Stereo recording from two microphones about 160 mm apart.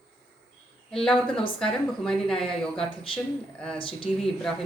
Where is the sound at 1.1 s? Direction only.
35° left (ahead or behind).